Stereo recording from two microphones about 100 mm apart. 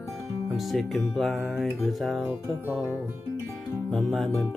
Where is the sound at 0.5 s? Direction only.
Centre (ahead or behind).